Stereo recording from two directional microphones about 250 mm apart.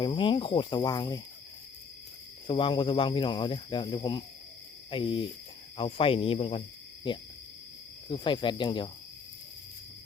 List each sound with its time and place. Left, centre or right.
0.0 s speech: centre
2.5 s speech: centre